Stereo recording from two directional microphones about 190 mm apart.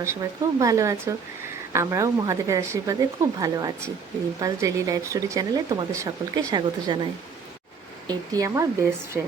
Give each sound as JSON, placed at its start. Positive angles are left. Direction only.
{"t": 0.6, "sound": "a woman's voice", "side_deg": -15}